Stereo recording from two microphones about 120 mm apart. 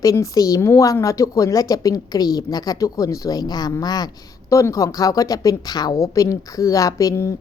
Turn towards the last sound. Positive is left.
turn(degrees=25)  # may be behind; listen again after turning